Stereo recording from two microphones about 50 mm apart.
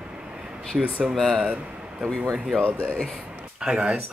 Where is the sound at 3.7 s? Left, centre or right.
Right.